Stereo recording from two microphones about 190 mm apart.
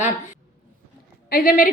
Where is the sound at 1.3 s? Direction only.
50° left (ahead or behind).